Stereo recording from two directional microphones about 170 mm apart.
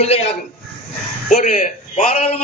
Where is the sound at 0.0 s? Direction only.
40° left (ahead or behind).